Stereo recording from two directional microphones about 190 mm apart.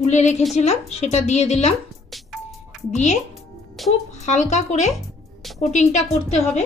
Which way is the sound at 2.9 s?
35° left (ahead or behind).